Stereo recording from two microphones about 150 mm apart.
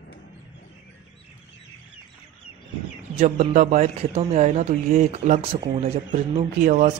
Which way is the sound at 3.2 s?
50° right (ahead or behind).